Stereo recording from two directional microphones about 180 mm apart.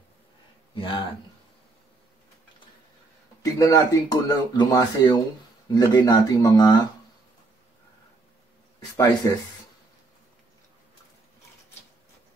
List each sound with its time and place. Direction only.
0.7 s speech: 30° left (ahead or behind)
3.5 s speech: 20° left (ahead or behind)
8.9 s speech: 20° left (ahead or behind)